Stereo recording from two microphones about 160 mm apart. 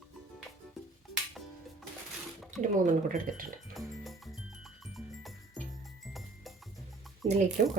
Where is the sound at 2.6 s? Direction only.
55° right (ahead or behind).